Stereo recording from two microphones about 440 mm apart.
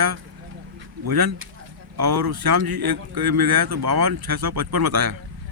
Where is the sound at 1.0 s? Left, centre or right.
Right.